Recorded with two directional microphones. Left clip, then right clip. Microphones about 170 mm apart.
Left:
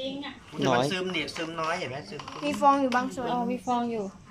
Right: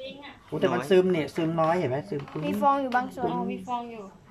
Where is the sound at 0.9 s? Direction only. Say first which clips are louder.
Right 7 dB; 50° right (ahead or behind).